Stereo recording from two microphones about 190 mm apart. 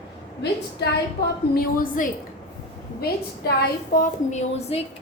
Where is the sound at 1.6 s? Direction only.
45° left (ahead or behind).